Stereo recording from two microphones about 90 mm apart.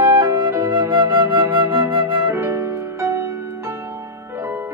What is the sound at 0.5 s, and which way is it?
Flute, 20° right (ahead or behind).